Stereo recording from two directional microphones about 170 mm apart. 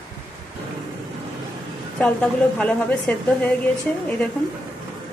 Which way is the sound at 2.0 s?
5° left (ahead or behind).